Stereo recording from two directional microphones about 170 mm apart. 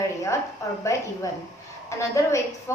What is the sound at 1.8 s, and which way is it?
Speech, 15° left (ahead or behind).